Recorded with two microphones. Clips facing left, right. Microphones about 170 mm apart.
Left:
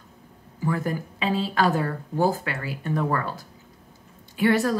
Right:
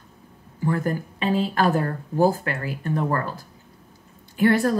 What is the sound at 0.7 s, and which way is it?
Speech, 45° right (ahead or behind).